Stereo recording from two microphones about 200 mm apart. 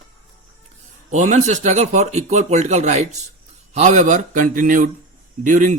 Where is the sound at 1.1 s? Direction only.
35° right (ahead or behind).